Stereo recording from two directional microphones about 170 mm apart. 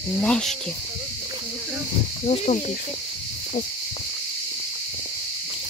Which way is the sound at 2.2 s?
40° left (ahead or behind).